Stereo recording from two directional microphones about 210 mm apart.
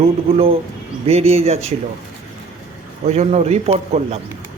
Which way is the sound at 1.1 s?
30° right (ahead or behind).